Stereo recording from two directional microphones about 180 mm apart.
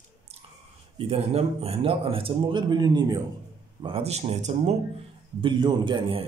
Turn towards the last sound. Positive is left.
turn(degrees=-30)  # may be behind; listen again after turning